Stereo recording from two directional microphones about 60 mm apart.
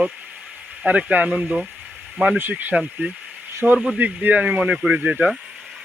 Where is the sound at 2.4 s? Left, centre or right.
Right.